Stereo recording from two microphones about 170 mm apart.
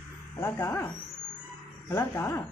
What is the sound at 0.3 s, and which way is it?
Speech, 15° left (ahead or behind).